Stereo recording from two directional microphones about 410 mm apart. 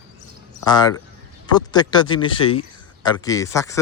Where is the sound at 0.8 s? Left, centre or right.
Centre.